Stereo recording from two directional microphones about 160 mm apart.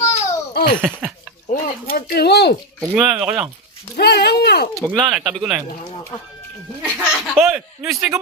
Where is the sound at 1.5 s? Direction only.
65° left (ahead or behind); by 2.5 s 90° left.